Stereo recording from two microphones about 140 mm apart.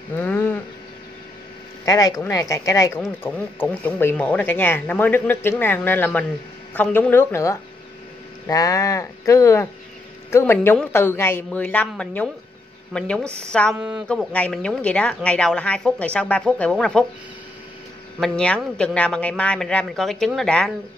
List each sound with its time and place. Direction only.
0.2 s a sound: 15° left (ahead or behind)
1.9 s speech: 25° left (ahead or behind); by 13.7 s 5° left (ahead or behind)
13.7 s speech: 10° right (ahead or behind)
14.0 s speech: 10° left (ahead or behind)
18.2 s speech: 5° left (ahead or behind)